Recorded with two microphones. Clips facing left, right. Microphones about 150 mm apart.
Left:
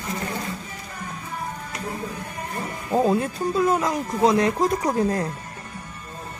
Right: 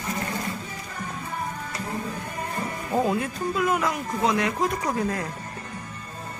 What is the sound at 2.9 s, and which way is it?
Speech, 25° left (ahead or behind).